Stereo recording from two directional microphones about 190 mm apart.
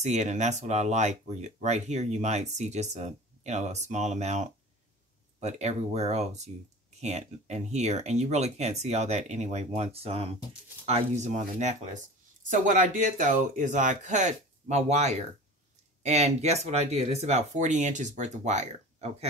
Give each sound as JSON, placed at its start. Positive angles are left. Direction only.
{"t": 0.0, "sound": "speech", "side_deg": -35}